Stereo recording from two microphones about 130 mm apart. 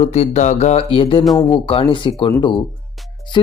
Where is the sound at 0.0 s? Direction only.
55° left (ahead or behind).